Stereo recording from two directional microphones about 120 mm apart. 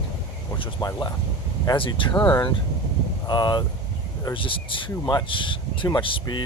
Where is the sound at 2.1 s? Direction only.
15° left (ahead or behind).